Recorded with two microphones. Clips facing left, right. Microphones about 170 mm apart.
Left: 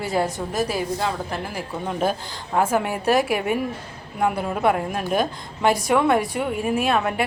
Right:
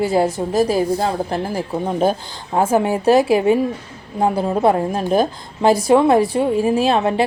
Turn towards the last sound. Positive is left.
turn(degrees=-30)  # may be behind; listen again after turning